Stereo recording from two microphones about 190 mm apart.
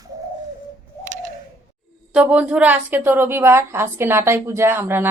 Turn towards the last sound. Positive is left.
turn(degrees=-10)  # may be behind; listen again after turning